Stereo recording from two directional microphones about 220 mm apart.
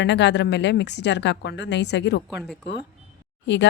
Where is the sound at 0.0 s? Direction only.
50° left (ahead or behind).